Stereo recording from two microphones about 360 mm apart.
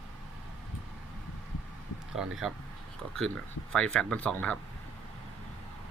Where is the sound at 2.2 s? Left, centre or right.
Centre.